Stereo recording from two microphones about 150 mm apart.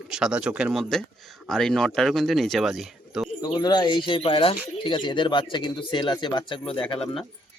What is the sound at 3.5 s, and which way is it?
Speech, 30° left (ahead or behind).